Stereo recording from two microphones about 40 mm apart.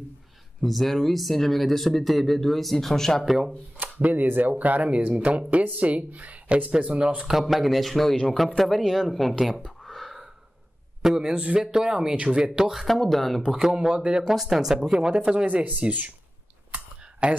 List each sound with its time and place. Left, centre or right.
0.6 s speech: centre
3.3 s speech: centre
3.8 s speech: right
7.3 s speech: centre
9.8 s a sound: centre
11.1 s speech: centre
11.3 s speech: right
11.8 s speech: centre
12.7 s speech: centre
13.5 s speech: centre
13.7 s speech: right
14.2 s speech: centre
15.4 s speech: right
17.2 s speech: right